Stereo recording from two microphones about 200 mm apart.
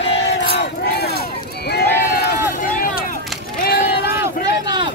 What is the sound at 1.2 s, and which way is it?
Run, 55° left (ahead or behind).